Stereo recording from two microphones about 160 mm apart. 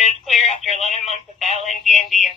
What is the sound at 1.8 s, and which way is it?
Speech, centre (ahead or behind).